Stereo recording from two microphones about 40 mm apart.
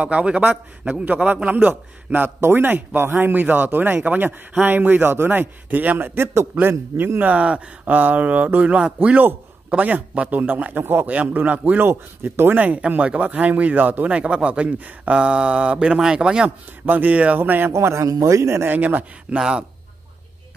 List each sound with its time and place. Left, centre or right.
0.0 s a man's voice: right
1.0 s a man's voice: right
6.6 s speech: right
7.2 s a man's voice: right
7.8 s a man's voice: right
10.4 s speech: right
11.3 s a man's voice: right
11.8 s speech: right
12.5 s a man's voice: right
12.9 s a man's voice: right
16.8 s a man's voice: right
17.4 s speech: right
18.7 s a man's voice: right
19.3 s a man's voice: right